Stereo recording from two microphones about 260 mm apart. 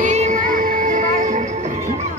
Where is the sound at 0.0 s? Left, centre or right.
Right.